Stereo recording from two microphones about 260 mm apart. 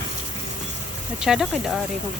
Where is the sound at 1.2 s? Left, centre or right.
Centre.